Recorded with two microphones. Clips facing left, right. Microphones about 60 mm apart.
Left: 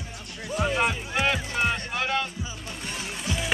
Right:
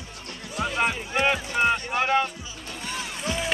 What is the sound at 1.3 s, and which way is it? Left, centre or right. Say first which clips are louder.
Music: right 4 dB; centre.